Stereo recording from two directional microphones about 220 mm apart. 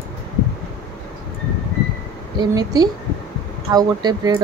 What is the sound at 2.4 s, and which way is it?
Speech, 20° right (ahead or behind).